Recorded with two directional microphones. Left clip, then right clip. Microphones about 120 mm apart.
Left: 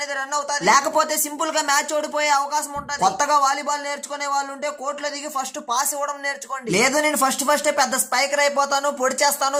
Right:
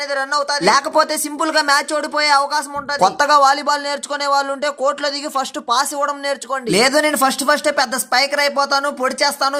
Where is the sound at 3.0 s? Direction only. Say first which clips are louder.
Right 5 dB; 40° right (ahead or behind).